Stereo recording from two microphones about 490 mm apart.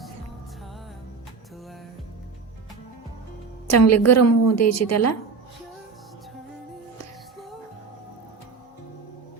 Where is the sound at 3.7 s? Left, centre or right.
Left.